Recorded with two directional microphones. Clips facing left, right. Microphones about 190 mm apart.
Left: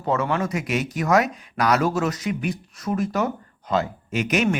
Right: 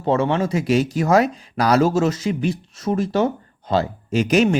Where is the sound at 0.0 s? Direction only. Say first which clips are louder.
Right 4 dB; 25° right (ahead or behind).